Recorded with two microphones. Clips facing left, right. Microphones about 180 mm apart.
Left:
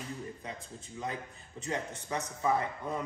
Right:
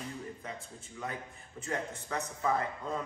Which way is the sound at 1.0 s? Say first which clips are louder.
Left 2 dB; 20° left (ahead or behind).